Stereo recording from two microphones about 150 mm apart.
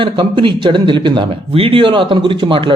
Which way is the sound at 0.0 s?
35° right (ahead or behind).